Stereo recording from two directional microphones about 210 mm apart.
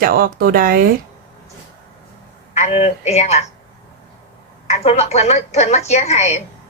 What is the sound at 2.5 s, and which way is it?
Speech, 30° left (ahead or behind).